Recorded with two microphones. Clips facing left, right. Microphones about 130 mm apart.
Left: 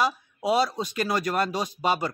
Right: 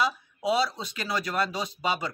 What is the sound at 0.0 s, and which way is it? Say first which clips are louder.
Speech: left 2 dB; 45° left (ahead or behind).